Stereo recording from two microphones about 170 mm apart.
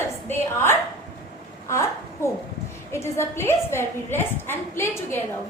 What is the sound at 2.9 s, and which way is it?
A woman's voice, 15° left (ahead or behind).